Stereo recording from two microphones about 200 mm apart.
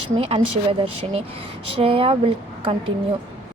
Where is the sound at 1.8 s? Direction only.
25° right (ahead or behind).